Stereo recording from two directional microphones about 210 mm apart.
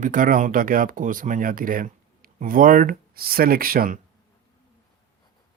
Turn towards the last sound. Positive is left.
turn(degrees=-40)  # may be behind; listen again after turning